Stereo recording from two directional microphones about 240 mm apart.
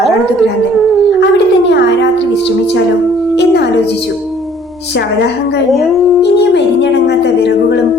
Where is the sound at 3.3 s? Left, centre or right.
Left.